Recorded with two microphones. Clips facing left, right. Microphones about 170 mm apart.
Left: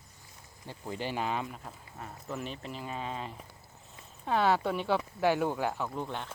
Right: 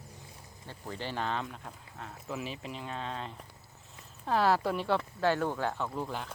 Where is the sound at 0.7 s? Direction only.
15° left (ahead or behind).